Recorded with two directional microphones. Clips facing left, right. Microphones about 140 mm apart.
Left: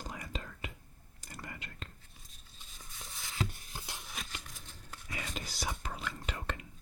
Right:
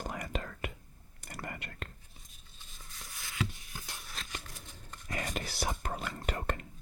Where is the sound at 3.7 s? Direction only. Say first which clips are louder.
Left 1 dB; 15° left (ahead or behind).